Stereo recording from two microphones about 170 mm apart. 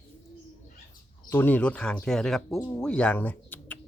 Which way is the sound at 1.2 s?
10° left (ahead or behind).